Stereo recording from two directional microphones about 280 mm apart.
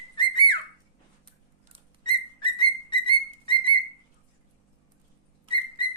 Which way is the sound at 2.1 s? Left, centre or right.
Centre.